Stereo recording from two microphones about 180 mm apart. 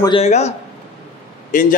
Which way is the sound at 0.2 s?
40° left (ahead or behind).